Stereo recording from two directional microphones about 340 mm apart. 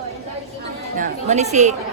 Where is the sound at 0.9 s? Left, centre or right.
Right.